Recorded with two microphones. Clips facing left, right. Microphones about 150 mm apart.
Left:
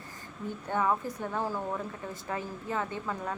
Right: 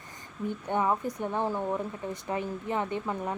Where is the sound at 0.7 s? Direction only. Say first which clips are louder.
Right 1 dB; 20° right (ahead or behind).